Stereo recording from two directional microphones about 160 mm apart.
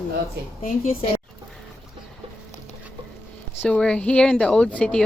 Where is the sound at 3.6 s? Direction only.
5° left (ahead or behind).